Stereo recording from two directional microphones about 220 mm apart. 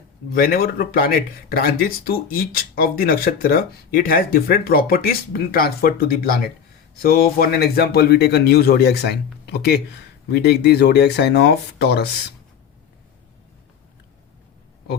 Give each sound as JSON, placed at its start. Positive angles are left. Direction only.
{"t": 0.3, "sound": "speech", "side_deg": 40}